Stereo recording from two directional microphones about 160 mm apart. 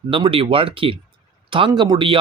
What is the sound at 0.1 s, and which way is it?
Speech, 35° right (ahead or behind).